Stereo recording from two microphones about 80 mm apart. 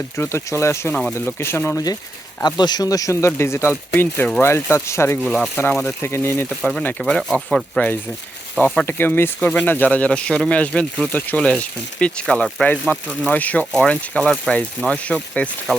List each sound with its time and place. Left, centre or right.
0.2 s speech: left
2.4 s speech: left
7.0 s speech: centre
8.9 s speech: left